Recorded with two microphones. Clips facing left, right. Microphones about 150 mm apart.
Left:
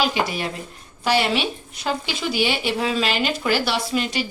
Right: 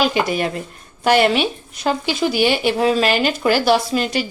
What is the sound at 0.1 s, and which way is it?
Speech, 55° right (ahead or behind).